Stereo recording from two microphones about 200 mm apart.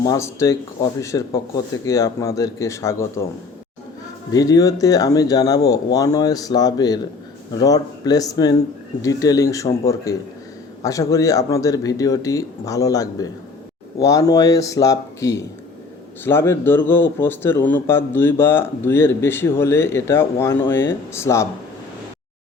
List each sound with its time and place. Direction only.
0.0 s speech: 15° left (ahead or behind)
4.3 s speech: 20° left (ahead or behind)